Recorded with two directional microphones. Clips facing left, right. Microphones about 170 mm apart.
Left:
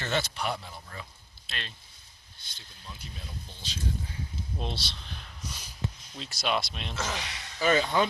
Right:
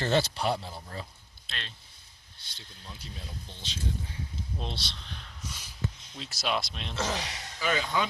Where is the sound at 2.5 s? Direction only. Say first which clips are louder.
Even; 35° right (ahead or behind).